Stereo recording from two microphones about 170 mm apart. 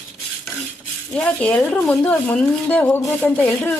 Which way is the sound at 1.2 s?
5° left (ahead or behind).